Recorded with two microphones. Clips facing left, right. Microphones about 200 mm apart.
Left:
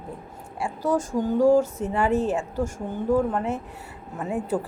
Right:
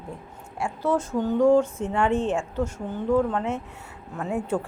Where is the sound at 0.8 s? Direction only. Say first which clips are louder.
Even; 40° left (ahead or behind).